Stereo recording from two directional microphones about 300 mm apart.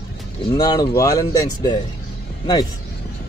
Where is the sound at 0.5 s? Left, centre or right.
Centre.